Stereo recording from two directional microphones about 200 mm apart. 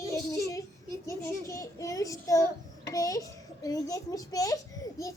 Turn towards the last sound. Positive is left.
turn(degrees=15)  # may be behind; listen again after turning